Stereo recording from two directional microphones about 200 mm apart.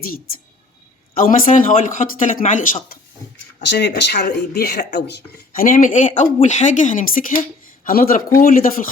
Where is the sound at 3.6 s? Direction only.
60° left (ahead or behind).